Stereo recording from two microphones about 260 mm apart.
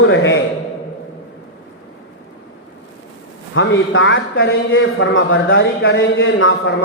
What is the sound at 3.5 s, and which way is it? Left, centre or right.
A man's voice, left.